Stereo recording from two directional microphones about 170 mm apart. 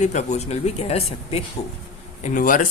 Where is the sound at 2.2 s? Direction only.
50° left (ahead or behind).